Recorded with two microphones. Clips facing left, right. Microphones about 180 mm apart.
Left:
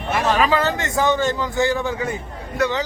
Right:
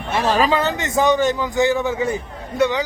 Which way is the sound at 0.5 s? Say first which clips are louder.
Right 1 dB; 20° right (ahead or behind).